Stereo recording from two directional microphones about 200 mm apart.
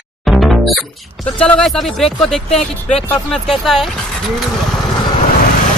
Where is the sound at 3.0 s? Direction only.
Centre (ahead or behind).